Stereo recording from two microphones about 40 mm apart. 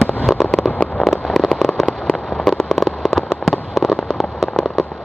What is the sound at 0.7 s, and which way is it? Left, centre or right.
Fireworks, left.